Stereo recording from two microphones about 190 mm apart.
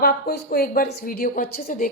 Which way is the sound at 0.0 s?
55° left (ahead or behind).